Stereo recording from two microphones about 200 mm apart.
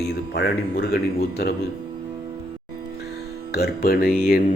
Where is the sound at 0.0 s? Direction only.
55° left (ahead or behind).